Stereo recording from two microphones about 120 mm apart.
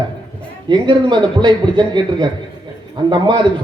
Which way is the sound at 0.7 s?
40° right (ahead or behind).